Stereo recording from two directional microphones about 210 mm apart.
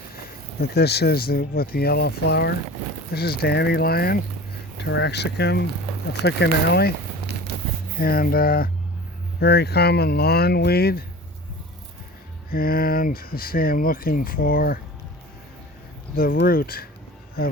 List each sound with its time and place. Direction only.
0.6 s speech: 50° left (ahead or behind)
7.9 s speech: 45° left (ahead or behind)
12.5 s speech: 45° left (ahead or behind)
16.1 s speech: 45° left (ahead or behind)